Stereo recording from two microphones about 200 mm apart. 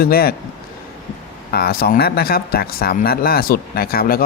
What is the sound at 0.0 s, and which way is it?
Speech, 50° left (ahead or behind).